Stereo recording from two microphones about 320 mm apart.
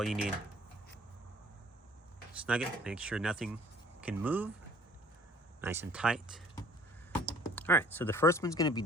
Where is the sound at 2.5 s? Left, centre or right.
Centre.